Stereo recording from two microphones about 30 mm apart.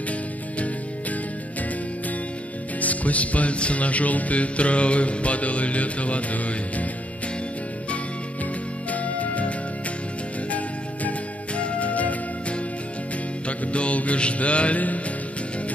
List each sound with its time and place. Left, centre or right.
2.8 s music: left
8.9 s music: left
11.5 s music: left